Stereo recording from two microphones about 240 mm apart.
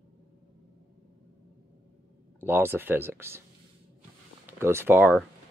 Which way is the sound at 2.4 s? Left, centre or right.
Centre.